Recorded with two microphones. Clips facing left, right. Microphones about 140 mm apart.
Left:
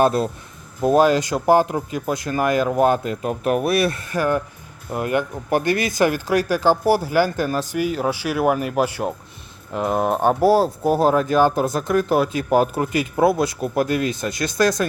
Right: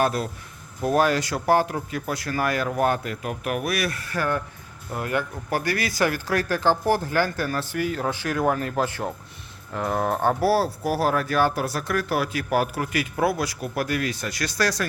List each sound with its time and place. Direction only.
0.0 s speech: 25° left (ahead or behind)